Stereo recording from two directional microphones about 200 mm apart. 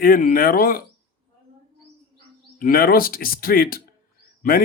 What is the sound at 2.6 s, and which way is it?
Speech, 50° left (ahead or behind).